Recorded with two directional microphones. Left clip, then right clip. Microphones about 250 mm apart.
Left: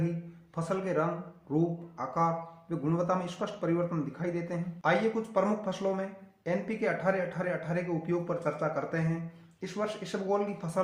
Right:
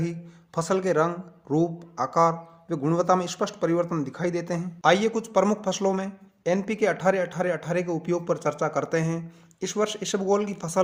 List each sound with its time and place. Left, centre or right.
0.5 s speech: right